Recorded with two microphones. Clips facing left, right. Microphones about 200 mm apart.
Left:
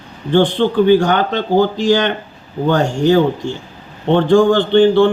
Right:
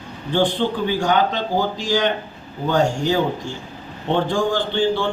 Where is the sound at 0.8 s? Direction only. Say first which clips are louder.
Left 7 dB; 65° left (ahead or behind).